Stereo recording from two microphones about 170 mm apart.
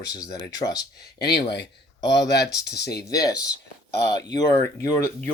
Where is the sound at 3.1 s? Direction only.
20° left (ahead or behind).